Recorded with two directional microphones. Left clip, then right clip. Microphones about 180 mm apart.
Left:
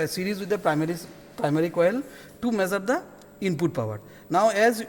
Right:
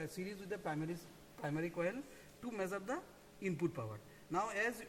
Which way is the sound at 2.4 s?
75° left (ahead or behind).